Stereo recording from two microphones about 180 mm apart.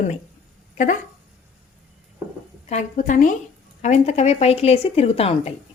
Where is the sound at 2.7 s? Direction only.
40° left (ahead or behind).